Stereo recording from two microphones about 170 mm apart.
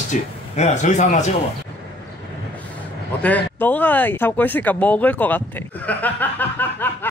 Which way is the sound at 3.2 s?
10° left (ahead or behind).